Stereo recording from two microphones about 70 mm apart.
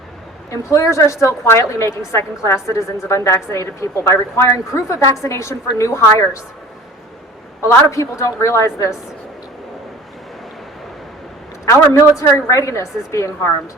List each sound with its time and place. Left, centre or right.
0.5 s a woman's voice: left
7.6 s a woman's voice: left
11.9 s a woman's voice: left